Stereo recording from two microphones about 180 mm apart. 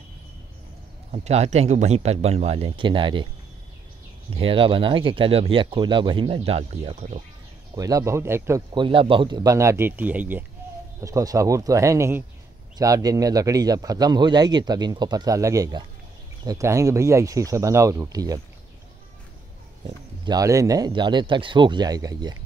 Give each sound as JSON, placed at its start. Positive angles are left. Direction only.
{"t": 1.1, "sound": "speech", "side_deg": -35}
{"t": 4.3, "sound": "a man's voice", "side_deg": -30}
{"t": 7.7, "sound": "speech", "side_deg": -20}
{"t": 8.7, "sound": "a man's voice", "side_deg": -30}
{"t": 20.2, "sound": "a man's voice", "side_deg": -20}